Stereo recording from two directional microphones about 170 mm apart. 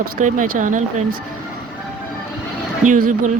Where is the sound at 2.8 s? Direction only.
50° right (ahead or behind).